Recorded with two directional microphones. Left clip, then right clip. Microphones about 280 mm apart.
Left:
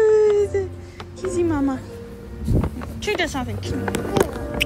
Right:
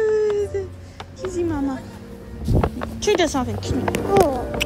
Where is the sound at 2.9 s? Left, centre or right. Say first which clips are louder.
Right 4 dB; centre.